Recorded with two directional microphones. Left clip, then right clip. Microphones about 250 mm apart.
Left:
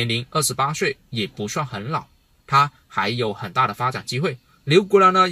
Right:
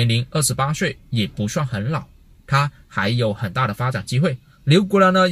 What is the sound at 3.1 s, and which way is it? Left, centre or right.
Speech, centre.